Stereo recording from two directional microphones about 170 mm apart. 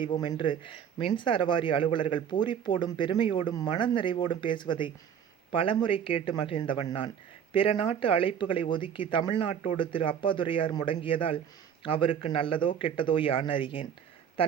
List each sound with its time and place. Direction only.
0.0 s speech: 25° left (ahead or behind)